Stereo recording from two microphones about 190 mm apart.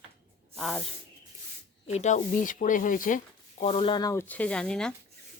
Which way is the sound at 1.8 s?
35° left (ahead or behind).